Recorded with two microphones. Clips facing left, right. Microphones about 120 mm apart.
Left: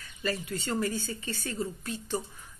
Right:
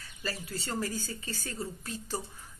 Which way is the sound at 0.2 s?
35° right (ahead or behind).